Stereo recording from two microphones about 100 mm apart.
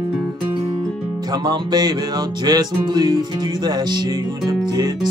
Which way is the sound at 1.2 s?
45° right (ahead or behind).